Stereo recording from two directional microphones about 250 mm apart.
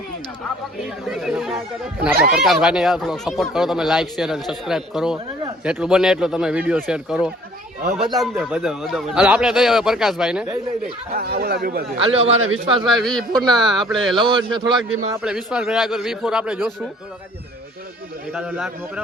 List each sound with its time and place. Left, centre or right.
1.0 s speech: centre
11.1 s speech: right
11.9 s a man's voice: right
12.2 s speech: right
12.8 s speech: centre
14.2 s a man's voice: centre
14.9 s speech: centre
18.3 s speech: centre